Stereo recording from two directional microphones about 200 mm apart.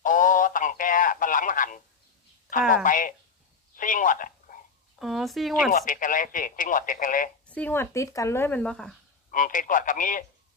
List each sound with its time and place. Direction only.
0.0 s radio: 40° left (ahead or behind)
2.8 s speech: 40° left (ahead or behind)
4.9 s speech: centre (ahead or behind)
5.7 s speech: 40° left (ahead or behind)
7.4 s speech: 5° left (ahead or behind)
9.3 s speech: 40° left (ahead or behind)